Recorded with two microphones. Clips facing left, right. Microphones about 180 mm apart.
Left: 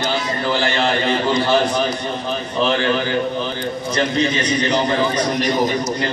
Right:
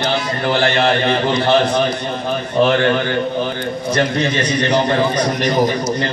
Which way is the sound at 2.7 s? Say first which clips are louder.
Right 3 dB; 55° right (ahead or behind).